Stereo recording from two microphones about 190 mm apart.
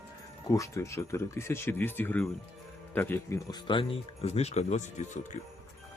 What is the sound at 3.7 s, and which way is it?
Speech, 30° left (ahead or behind).